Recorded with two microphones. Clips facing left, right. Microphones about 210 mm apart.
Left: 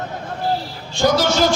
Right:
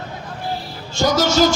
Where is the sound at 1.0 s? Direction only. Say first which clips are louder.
Even; 45° right (ahead or behind).